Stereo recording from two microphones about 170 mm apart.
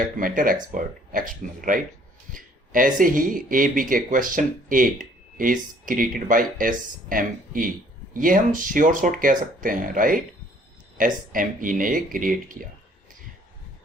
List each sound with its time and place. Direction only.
0.0 s speech: 55° right (ahead or behind)